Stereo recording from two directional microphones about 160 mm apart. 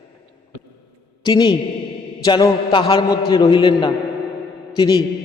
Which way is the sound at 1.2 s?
25° left (ahead or behind).